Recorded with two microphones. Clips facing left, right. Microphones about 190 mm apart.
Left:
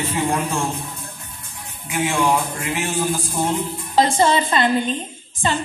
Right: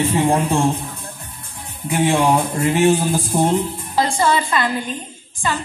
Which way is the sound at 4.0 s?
20° left (ahead or behind).